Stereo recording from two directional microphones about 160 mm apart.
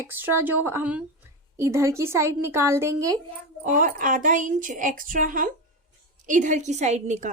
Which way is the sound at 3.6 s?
55° right (ahead or behind).